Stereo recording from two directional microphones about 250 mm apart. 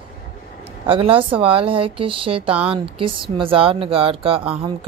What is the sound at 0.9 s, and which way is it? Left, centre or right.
Speech, right.